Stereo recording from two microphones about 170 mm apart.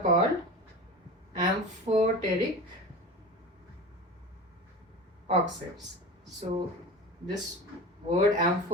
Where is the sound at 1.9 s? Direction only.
40° right (ahead or behind).